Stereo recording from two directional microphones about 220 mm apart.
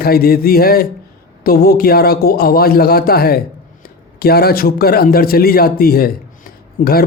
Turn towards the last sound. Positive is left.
turn(degrees=45)  # may be behind; listen again after turning